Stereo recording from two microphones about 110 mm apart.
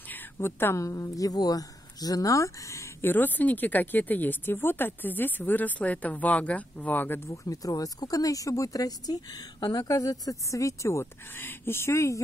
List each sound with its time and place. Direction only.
0.1 s speech: 20° left (ahead or behind)
7.2 s speech: 30° left (ahead or behind)